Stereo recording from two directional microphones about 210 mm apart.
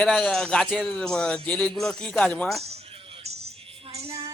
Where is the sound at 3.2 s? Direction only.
30° right (ahead or behind).